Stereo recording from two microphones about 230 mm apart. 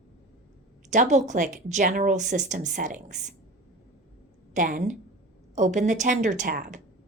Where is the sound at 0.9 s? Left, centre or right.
Right.